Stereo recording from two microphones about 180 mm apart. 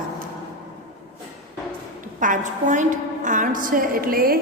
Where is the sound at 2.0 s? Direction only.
45° right (ahead or behind).